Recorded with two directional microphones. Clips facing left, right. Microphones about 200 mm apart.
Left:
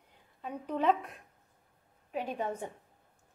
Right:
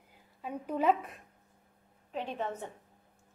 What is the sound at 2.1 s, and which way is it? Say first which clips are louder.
Speech: left 1 dB; 10° left (ahead or behind).